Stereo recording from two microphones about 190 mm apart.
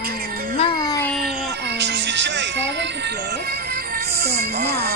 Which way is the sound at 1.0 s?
Centre (ahead or behind).